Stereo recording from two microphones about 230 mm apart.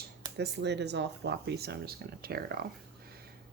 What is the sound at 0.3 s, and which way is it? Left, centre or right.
Speech, right.